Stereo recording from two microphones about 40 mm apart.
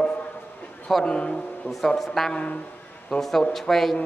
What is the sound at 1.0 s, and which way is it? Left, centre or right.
Speech, left.